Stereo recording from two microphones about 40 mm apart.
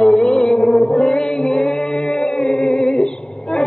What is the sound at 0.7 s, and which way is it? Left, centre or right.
Music, left.